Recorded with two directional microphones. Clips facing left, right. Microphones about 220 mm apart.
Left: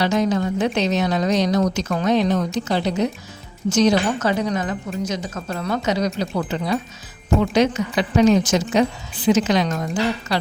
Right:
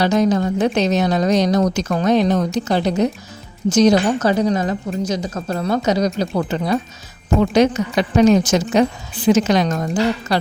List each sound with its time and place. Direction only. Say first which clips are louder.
0.0 s speech: right 3 dB; 40° right (ahead or behind)